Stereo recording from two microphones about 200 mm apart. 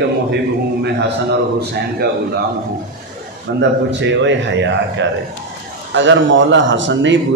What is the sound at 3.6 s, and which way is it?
A man's voice, 65° right (ahead or behind).